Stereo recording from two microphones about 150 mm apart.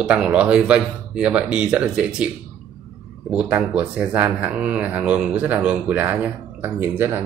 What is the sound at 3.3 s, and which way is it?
Speech, 10° right (ahead or behind).